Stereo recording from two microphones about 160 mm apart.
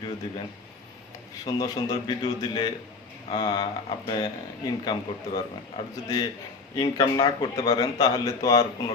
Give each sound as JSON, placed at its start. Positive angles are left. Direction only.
{"t": 1.5, "sound": "speech", "side_deg": 25}